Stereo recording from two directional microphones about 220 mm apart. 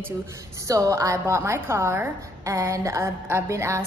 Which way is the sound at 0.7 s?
15° right (ahead or behind).